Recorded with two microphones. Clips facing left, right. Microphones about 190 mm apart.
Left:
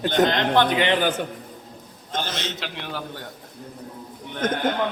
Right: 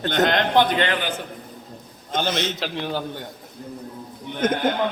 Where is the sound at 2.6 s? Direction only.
35° right (ahead or behind).